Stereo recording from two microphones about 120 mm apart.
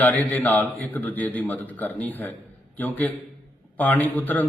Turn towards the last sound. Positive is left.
turn(degrees=15)  # may be behind; listen again after turning